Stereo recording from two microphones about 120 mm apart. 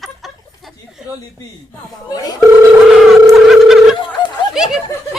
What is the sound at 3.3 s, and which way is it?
Telephone, centre (ahead or behind).